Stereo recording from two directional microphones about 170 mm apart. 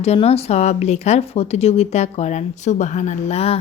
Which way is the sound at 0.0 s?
40° left (ahead or behind).